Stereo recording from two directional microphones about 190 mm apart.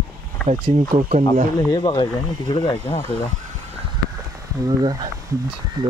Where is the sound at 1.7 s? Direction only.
25° left (ahead or behind).